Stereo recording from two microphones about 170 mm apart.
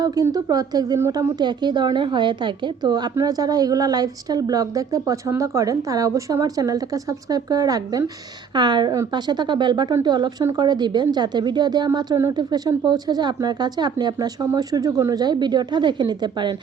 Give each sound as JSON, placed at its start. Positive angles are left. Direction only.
{"t": 0.0, "sound": "speech", "side_deg": -20}